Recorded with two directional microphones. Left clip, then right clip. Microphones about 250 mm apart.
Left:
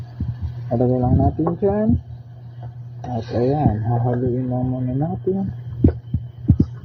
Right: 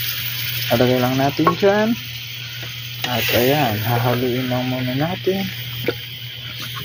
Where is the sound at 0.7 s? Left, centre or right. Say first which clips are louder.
Right 4 dB; right.